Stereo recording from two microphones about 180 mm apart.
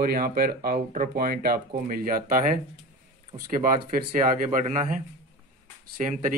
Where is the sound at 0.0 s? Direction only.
55° right (ahead or behind).